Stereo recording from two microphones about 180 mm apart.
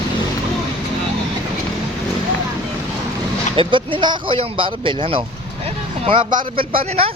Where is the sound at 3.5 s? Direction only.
30° right (ahead or behind).